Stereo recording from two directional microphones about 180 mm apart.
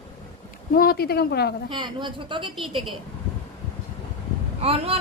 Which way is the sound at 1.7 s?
25° right (ahead or behind).